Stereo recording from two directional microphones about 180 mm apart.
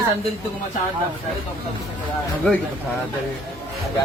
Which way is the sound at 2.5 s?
5° left (ahead or behind).